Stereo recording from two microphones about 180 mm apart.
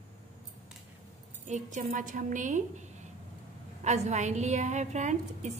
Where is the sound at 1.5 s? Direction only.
45° right (ahead or behind).